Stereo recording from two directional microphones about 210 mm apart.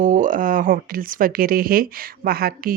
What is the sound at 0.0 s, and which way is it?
Speech, 40° right (ahead or behind).